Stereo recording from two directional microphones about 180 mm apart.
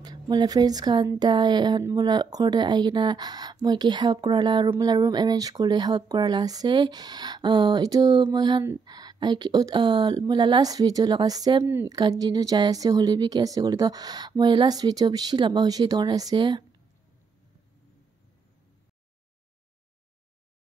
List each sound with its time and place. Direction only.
0.0 s speech: 25° right (ahead or behind)